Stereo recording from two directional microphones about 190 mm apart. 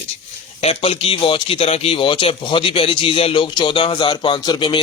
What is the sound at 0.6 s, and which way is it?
Speech, 30° left (ahead or behind).